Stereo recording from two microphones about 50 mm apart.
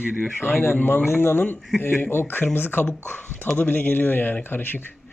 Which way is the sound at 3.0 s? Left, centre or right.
Left.